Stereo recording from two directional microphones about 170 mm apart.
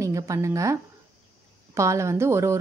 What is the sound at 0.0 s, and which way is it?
Speech, 20° right (ahead or behind).